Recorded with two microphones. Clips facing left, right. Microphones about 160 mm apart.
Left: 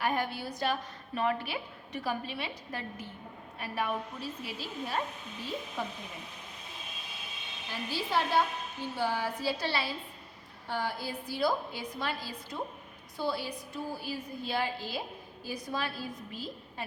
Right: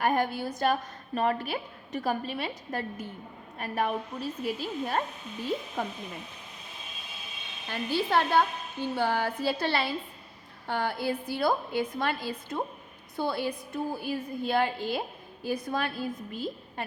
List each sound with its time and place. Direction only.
0.0 s a woman's voice: 50° right (ahead or behind)
7.7 s a woman's voice: 60° right (ahead or behind)